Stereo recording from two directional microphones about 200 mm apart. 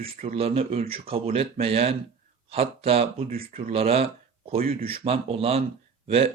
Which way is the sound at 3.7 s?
30° right (ahead or behind).